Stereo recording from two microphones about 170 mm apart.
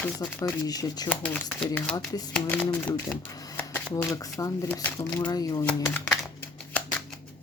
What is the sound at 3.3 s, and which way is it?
Shuffling cards, 20° left (ahead or behind).